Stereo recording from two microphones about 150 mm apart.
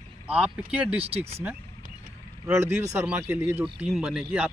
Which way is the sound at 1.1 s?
40° right (ahead or behind).